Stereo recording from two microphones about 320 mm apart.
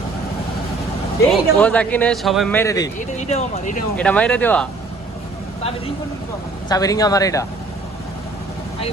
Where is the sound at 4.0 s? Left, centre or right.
Centre.